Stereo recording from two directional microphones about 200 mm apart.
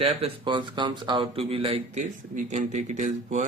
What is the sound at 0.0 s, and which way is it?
Speech, 30° right (ahead or behind).